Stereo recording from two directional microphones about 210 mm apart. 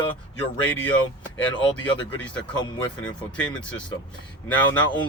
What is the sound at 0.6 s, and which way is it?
Speech, 10° left (ahead or behind).